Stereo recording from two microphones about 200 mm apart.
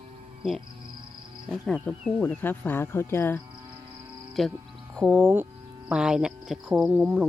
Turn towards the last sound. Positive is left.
turn(degrees=-5)  # may be behind; listen again after turning